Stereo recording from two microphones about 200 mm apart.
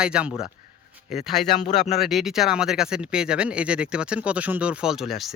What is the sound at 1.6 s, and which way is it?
Speech, 35° left (ahead or behind).